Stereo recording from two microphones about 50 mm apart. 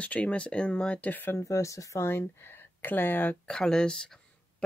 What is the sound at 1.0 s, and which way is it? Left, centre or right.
Speech, left.